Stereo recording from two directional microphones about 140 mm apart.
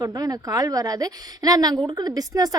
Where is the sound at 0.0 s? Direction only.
25° right (ahead or behind).